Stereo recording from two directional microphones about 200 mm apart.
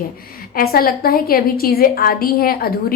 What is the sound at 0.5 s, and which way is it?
A woman's voice, 50° left (ahead or behind).